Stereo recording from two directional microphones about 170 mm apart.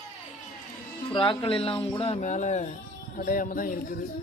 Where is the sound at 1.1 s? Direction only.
30° left (ahead or behind).